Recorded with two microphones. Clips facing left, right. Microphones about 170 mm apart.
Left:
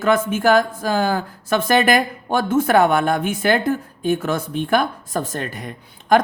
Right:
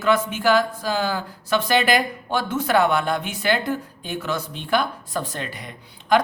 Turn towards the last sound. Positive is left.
turn(degrees=45)  # may be behind; listen again after turning